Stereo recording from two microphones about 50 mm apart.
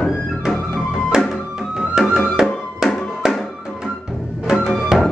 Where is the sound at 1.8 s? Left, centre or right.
Right.